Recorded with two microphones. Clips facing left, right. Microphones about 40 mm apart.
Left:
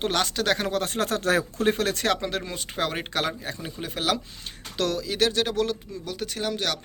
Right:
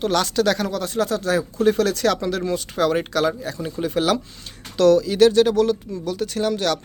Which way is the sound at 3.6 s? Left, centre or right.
Centre.